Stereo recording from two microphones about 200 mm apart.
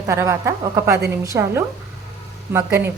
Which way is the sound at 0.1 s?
15° right (ahead or behind).